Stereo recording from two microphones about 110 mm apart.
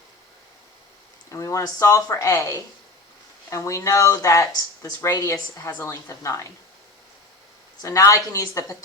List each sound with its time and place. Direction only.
1.3 s speech: 30° left (ahead or behind)
7.8 s speech: 30° left (ahead or behind)